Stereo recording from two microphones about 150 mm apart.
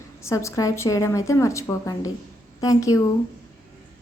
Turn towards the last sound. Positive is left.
turn(degrees=20)  # may be behind; listen again after turning